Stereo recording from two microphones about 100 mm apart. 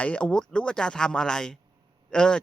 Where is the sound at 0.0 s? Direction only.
10° left (ahead or behind).